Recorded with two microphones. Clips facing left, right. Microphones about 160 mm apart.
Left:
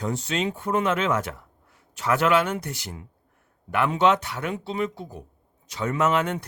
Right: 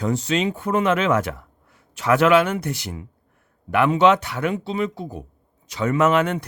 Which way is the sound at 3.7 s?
90° right.